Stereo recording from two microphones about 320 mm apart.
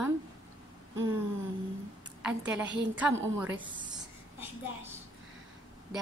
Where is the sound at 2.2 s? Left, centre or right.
Centre.